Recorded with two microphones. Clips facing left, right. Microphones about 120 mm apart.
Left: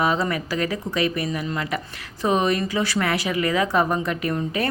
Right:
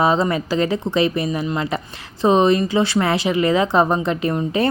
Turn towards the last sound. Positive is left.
turn(degrees=-25)  # may be behind; listen again after turning